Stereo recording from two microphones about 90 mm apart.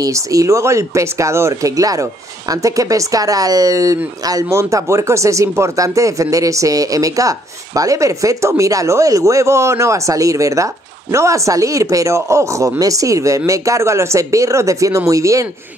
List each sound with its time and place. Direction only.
0.0 s speech: 40° right (ahead or behind)